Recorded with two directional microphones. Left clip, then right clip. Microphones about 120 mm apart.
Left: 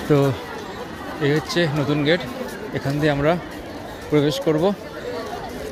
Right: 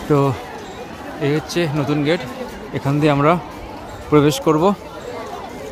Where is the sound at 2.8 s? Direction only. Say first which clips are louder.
Right 4 dB; 40° right (ahead or behind).